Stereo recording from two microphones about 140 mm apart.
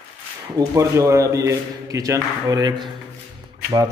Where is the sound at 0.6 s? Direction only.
20° right (ahead or behind).